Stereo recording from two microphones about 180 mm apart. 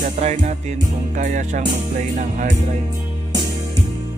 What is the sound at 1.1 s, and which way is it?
Music, 45° right (ahead or behind).